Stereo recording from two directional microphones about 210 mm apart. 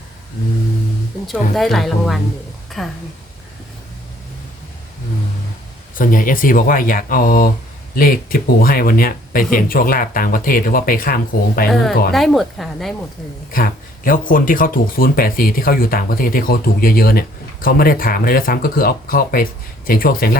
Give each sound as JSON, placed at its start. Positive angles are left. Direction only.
{"t": 1.3, "sound": "speech", "side_deg": 0}
{"t": 6.0, "sound": "speech", "side_deg": 40}
{"t": 11.7, "sound": "speech", "side_deg": 0}
{"t": 13.5, "sound": "speech", "side_deg": 40}